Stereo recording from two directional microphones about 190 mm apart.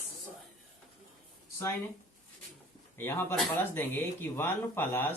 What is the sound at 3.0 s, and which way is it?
Speech, 10° left (ahead or behind).